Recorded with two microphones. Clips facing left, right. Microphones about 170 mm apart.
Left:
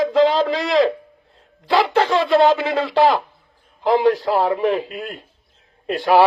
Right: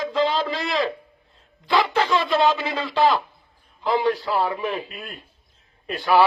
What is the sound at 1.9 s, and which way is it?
Speech, 60° left (ahead or behind).